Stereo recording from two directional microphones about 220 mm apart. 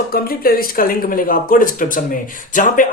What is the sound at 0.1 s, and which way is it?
Speech, 40° left (ahead or behind).